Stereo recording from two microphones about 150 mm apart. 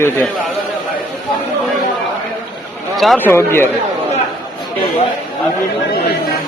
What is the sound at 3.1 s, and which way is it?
Speech, 15° left (ahead or behind).